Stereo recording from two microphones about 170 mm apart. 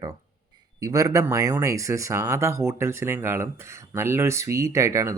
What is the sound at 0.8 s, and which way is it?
Speech, 20° right (ahead or behind).